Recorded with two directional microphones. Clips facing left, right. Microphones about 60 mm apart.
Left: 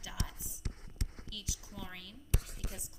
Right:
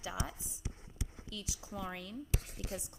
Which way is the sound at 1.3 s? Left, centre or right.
Right.